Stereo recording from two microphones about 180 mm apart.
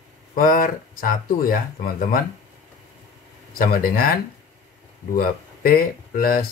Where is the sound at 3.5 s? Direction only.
55° left (ahead or behind).